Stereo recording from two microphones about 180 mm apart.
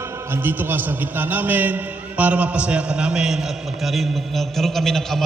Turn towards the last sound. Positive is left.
turn(degrees=0)  # may be behind; listen again after turning